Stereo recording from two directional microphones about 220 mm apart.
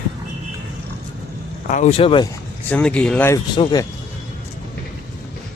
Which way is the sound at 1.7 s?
30° left (ahead or behind).